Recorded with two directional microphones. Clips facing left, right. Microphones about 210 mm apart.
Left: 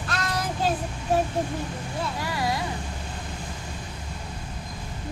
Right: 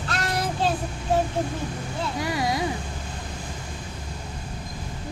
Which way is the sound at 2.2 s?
20° right (ahead or behind).